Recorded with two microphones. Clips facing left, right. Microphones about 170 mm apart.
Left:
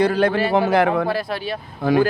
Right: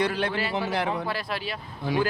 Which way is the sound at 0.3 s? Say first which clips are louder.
Left 10 dB; 55° left (ahead or behind).